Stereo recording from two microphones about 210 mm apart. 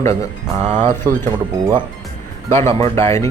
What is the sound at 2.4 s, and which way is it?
Speech, 10° left (ahead or behind).